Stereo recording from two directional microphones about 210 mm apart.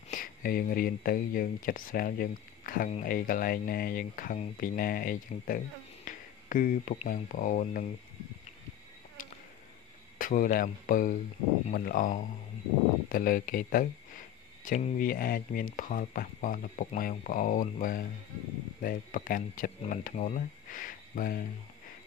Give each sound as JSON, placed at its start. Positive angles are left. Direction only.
{"t": 0.1, "sound": "speech", "side_deg": 40}
{"t": 10.1, "sound": "speech", "side_deg": 40}